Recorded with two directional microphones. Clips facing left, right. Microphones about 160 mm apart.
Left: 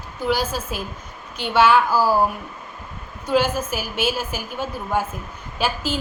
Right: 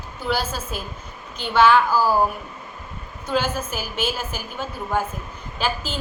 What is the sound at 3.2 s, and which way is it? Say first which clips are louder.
A woman's voice: left 4 dB; 10° left (ahead or behind).